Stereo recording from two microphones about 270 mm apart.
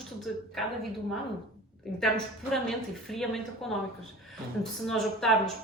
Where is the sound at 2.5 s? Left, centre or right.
Centre.